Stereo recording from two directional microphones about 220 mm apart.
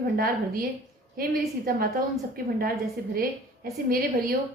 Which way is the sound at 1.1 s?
40° right (ahead or behind).